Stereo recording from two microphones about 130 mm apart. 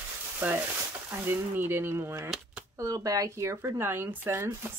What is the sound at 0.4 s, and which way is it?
Speech, 10° right (ahead or behind).